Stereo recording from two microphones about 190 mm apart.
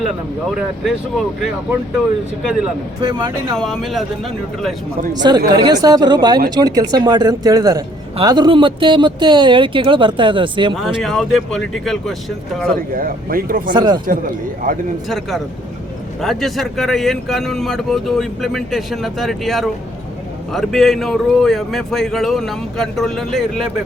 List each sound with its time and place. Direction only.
0.5 s speech: 5° right (ahead or behind)
3.0 s speech: 20° right (ahead or behind)
3.5 s speech: centre (ahead or behind)
5.2 s speech: 25° right (ahead or behind)
10.8 s speech: centre (ahead or behind)
12.7 s speech: 50° right (ahead or behind)
13.7 s speech: 25° right (ahead or behind)
16.2 s speech: centre (ahead or behind)